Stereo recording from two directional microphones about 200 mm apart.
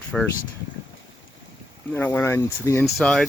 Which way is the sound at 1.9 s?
10° left (ahead or behind).